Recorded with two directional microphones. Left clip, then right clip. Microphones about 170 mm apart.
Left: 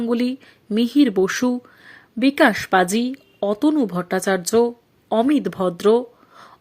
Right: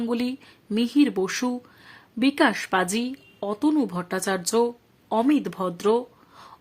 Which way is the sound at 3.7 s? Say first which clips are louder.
Left 4 dB; 15° left (ahead or behind).